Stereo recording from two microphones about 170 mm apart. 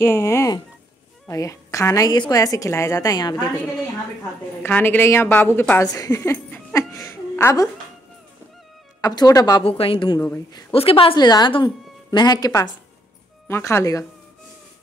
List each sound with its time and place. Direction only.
0.0 s a woman's voice: 15° left (ahead or behind)
4.6 s speech: 10° left (ahead or behind)
9.0 s a woman's voice: 20° left (ahead or behind)
9.7 s a woman's voice: 35° left (ahead or behind)
10.2 s speech: 15° left (ahead or behind)
10.7 s a woman's voice: 35° left (ahead or behind); by 14.0 s 20° left (ahead or behind)